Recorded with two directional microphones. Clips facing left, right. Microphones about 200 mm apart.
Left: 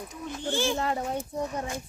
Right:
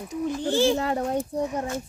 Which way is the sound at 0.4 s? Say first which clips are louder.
Right 5 dB; 35° right (ahead or behind).